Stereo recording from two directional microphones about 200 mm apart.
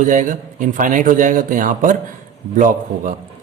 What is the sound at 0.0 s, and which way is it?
A man's voice, 40° right (ahead or behind).